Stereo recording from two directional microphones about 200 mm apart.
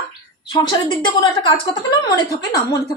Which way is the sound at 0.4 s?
20° left (ahead or behind).